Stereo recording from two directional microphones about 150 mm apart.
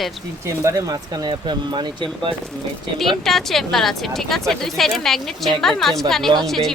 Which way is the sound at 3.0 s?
Centre (ahead or behind).